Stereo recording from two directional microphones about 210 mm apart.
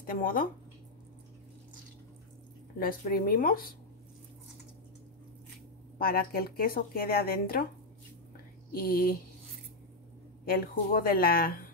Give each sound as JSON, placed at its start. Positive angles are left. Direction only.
{"t": 0.0, "sound": "speech", "side_deg": 40}
{"t": 2.8, "sound": "speech", "side_deg": 40}
{"t": 5.9, "sound": "speech", "side_deg": 45}
{"t": 8.7, "sound": "speech", "side_deg": 45}
{"t": 10.4, "sound": "speech", "side_deg": 45}